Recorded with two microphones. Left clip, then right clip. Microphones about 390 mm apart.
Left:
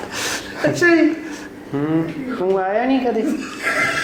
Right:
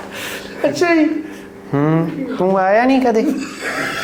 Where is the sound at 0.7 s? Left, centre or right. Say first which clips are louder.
Left 1 dB; right.